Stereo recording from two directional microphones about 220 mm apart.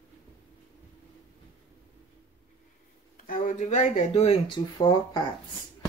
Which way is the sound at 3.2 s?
35° left (ahead or behind).